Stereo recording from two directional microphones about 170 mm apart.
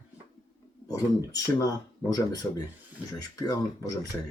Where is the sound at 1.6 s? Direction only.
20° left (ahead or behind).